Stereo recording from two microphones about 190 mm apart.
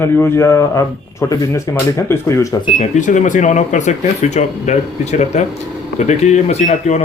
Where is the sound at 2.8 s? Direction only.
40° left (ahead or behind).